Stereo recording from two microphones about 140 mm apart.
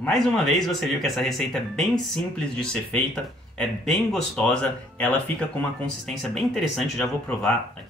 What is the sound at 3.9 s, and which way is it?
Speech, 5° left (ahead or behind).